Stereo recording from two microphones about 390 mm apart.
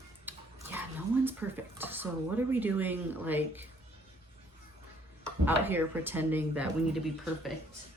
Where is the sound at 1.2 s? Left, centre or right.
Centre.